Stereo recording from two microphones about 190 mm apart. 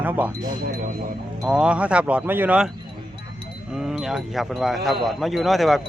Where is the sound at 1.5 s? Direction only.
5° right (ahead or behind).